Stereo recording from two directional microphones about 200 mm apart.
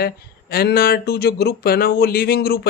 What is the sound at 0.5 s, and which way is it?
Speech, 50° left (ahead or behind).